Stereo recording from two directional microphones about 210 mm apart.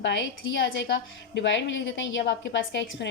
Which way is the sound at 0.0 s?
60° left (ahead or behind).